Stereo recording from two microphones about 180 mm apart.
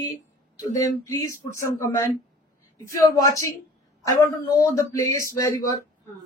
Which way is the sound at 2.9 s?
15° left (ahead or behind).